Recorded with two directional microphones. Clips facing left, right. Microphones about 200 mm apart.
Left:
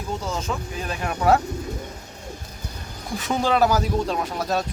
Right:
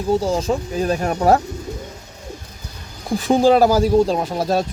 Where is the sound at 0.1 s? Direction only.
35° right (ahead or behind).